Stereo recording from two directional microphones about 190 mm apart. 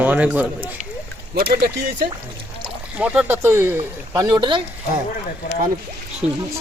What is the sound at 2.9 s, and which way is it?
Speech, 5° right (ahead or behind).